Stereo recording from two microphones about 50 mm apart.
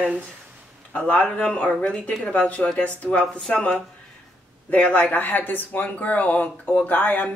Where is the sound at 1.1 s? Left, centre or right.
Left.